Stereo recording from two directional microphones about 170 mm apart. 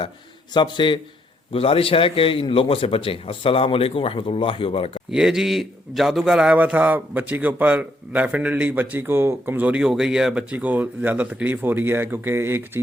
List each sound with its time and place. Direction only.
0.5 s a man's voice: 25° left (ahead or behind)
5.1 s a man's voice: 5° right (ahead or behind)